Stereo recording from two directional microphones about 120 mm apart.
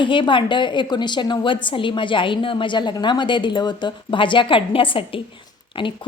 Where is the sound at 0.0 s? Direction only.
45° left (ahead or behind).